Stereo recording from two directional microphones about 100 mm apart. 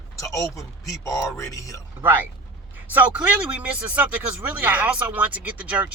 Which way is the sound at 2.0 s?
15° right (ahead or behind).